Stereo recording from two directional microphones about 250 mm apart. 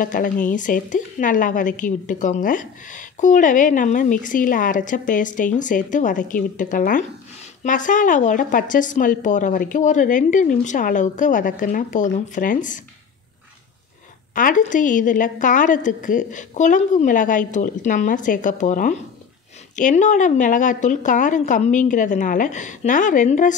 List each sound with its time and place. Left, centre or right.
0.0 s a woman's voice: left
14.3 s a woman's voice: left